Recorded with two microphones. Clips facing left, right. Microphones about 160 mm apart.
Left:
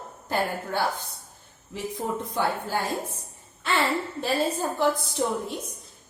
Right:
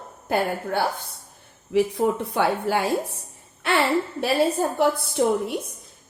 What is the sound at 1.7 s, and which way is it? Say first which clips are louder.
A woman's voice: right 10 dB; 70° right (ahead or behind).